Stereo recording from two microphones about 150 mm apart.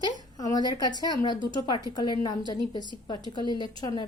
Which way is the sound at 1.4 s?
30° right (ahead or behind).